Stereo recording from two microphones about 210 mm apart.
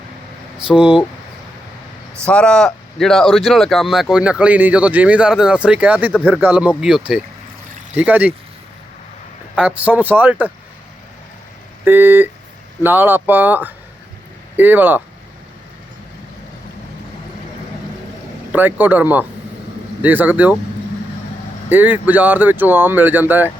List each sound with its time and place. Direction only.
0.7 s speech: 5° right (ahead or behind)
2.2 s speech: 5° left (ahead or behind)
9.6 s speech: 5° right (ahead or behind)
11.9 s speech: 10° right (ahead or behind)
18.5 s speech: 10° right (ahead or behind)
21.7 s speech: 10° right (ahead or behind)